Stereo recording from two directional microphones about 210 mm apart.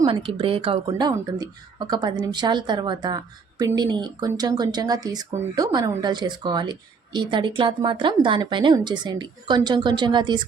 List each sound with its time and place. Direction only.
0.0 s a woman's voice: 25° right (ahead or behind)